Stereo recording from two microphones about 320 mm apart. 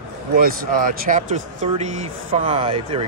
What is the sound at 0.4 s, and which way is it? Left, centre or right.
Speech, right.